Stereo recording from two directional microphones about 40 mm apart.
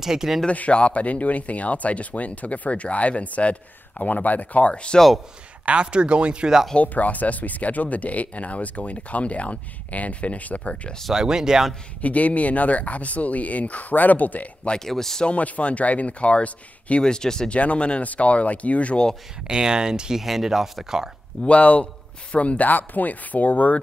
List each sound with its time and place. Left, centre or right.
0.0 s speech: centre
0.5 s speech: left
5.7 s speech: right
6.8 s speech: left
10.6 s speech: left
11.1 s speech: centre
12.0 s speech: left
14.9 s speech: centre
15.2 s speech: left
17.0 s speech: centre
17.5 s speech: left
19.4 s speech: centre
20.2 s speech: centre
21.5 s speech: left